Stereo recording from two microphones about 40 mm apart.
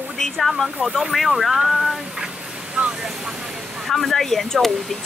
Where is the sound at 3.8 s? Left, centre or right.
Centre.